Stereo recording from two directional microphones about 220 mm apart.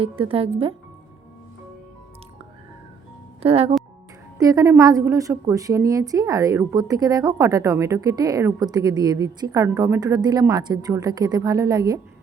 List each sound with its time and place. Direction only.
0.0 s speech: 25° right (ahead or behind)
3.4 s speech: 25° right (ahead or behind)
4.4 s a woman's voice: 15° right (ahead or behind)